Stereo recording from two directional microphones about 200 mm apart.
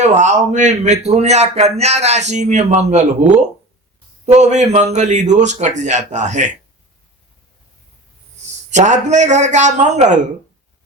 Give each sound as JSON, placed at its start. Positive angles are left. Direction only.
{"t": 0.0, "sound": "a man's voice", "side_deg": -35}
{"t": 8.7, "sound": "a man's voice", "side_deg": -35}